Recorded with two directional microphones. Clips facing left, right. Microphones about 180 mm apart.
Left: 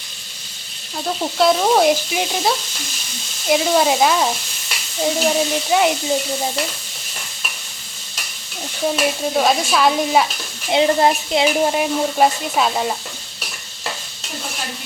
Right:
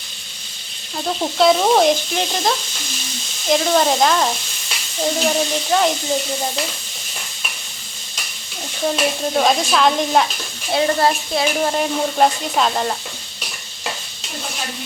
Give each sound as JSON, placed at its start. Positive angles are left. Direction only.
{"t": 0.9, "sound": "sizzle", "side_deg": 0}
{"t": 8.9, "sound": "sizzle", "side_deg": 5}
{"t": 10.7, "sound": "speech", "side_deg": 20}
{"t": 11.7, "sound": "sizzle", "side_deg": 5}